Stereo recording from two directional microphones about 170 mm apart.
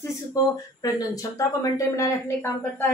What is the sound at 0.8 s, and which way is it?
Speech, 20° left (ahead or behind).